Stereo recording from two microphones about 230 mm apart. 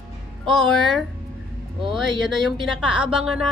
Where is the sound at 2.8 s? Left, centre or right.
Centre.